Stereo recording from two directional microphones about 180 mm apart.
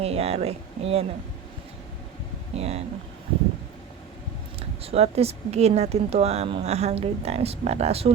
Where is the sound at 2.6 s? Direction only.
35° right (ahead or behind).